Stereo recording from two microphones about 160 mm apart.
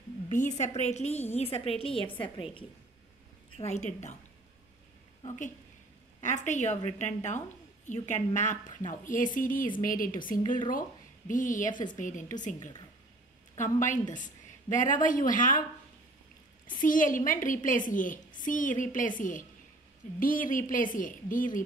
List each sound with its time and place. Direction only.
0.3 s a woman's voice: 50° left (ahead or behind); by 2.0 s 35° left (ahead or behind)
3.5 s a woman's voice: 45° left (ahead or behind)
5.2 s a woman's voice: 50° left (ahead or behind)
13.6 s a woman's voice: 50° left (ahead or behind)
16.7 s a woman's voice: 55° left (ahead or behind)